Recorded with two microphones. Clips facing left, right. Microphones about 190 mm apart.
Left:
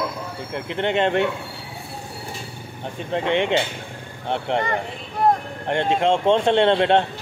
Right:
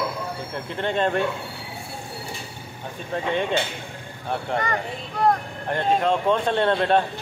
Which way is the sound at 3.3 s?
80° left.